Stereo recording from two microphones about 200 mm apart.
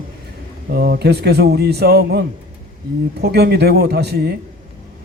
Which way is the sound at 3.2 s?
55° right (ahead or behind).